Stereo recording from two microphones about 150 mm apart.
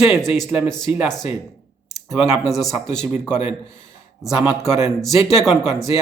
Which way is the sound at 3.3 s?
50° left (ahead or behind).